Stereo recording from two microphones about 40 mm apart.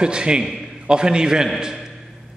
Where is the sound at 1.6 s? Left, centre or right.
Centre.